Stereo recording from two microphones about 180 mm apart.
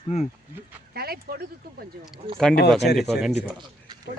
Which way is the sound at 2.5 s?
65° left (ahead or behind).